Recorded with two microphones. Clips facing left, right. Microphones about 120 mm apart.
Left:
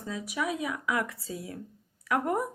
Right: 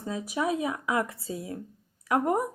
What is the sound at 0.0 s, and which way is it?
Speech, 30° right (ahead or behind).